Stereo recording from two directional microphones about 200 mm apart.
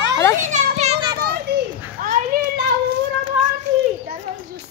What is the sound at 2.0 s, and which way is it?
Children playing, 45° right (ahead or behind).